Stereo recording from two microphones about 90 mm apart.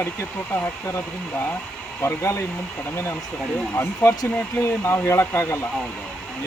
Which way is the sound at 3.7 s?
30° left (ahead or behind).